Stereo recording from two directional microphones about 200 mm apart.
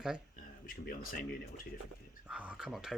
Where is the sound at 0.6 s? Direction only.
45° left (ahead or behind).